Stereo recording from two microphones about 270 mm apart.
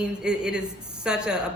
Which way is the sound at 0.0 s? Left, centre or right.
Centre.